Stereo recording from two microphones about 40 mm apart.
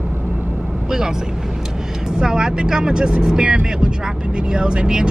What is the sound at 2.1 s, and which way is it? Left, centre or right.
Speech, centre.